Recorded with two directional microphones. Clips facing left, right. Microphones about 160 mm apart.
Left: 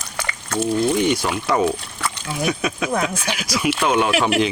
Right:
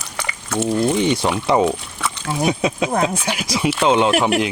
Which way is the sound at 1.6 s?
Centre (ahead or behind).